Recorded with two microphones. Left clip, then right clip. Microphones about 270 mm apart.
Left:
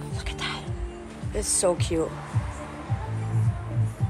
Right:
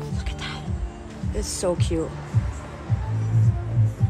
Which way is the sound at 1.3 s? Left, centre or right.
Centre.